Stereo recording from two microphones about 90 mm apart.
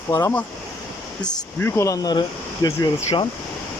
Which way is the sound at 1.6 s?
35° left (ahead or behind).